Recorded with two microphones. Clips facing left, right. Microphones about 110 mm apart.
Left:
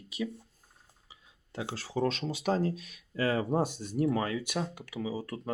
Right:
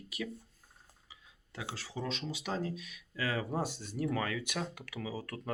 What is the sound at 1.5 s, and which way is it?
Speech, 40° left (ahead or behind).